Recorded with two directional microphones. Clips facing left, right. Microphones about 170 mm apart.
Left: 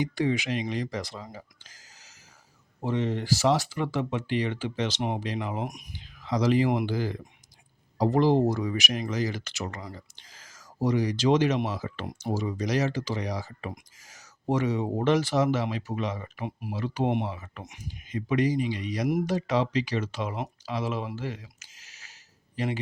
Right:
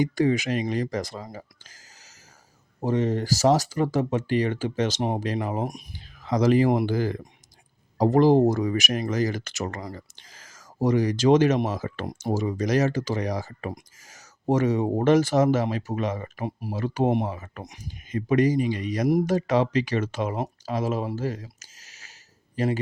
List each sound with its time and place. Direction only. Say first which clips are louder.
0.0 s speech: right 5 dB; 45° right (ahead or behind)
2.8 s speech: right 4 dB; 45° right (ahead or behind)
6.2 s a man's voice: right 4 dB; 50° right (ahead or behind)